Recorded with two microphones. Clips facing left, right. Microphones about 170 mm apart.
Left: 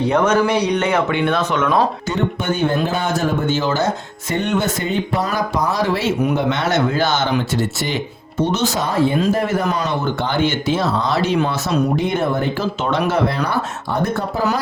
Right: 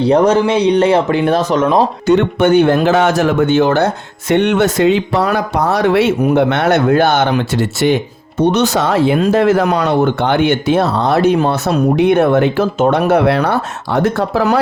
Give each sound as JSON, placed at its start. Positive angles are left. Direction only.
{"t": 0.0, "sound": "speech", "side_deg": -35}
{"t": 2.0, "sound": "speech", "side_deg": -70}
{"t": 12.8, "sound": "speech", "side_deg": -55}